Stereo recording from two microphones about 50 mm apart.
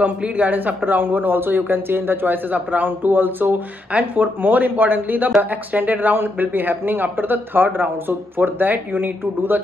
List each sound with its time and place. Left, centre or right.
0.0 s speech: right